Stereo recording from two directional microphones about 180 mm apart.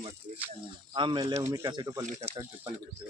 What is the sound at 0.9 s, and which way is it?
Speech, 25° right (ahead or behind).